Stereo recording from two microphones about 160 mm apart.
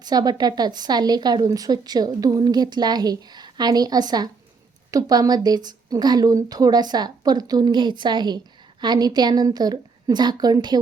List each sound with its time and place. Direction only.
0.0 s speech: 25° right (ahead or behind)